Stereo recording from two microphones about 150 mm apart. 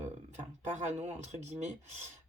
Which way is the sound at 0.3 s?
50° right (ahead or behind).